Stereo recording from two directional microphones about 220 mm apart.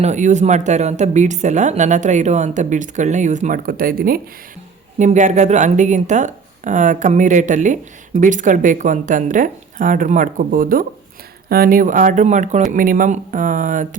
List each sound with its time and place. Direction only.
0.0 s speech: 35° right (ahead or behind)